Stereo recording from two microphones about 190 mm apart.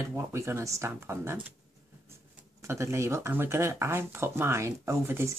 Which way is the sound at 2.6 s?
15° right (ahead or behind).